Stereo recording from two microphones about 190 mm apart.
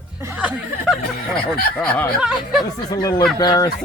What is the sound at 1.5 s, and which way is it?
Speech, 5° left (ahead or behind).